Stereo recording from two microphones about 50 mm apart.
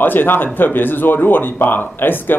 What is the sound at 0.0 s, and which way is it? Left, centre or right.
Speech, left.